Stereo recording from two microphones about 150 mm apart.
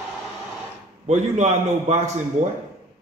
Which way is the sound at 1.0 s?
50° right (ahead or behind).